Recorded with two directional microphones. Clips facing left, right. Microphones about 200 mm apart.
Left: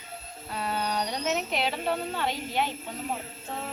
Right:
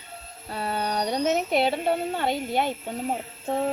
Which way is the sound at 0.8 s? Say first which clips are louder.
Right 7 dB; 50° right (ahead or behind).